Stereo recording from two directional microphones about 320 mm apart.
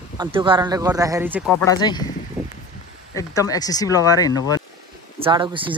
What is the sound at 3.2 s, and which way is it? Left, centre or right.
Speech, centre.